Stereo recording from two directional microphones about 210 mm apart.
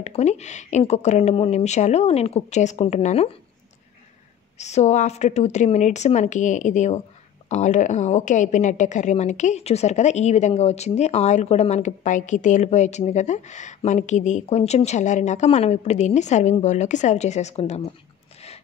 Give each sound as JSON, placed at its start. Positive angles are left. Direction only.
{"t": 0.0, "sound": "a woman's voice", "side_deg": 30}
{"t": 4.6, "sound": "a woman's voice", "side_deg": 35}